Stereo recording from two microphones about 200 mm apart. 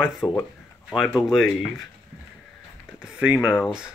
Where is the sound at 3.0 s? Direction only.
5° right (ahead or behind).